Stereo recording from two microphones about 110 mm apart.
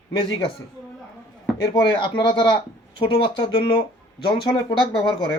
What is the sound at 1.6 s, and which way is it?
Speech, 45° left (ahead or behind).